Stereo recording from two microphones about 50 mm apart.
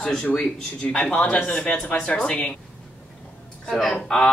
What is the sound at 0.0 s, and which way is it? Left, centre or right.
Speech, centre.